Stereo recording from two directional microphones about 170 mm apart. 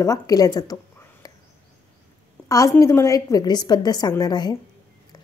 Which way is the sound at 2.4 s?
20° left (ahead or behind).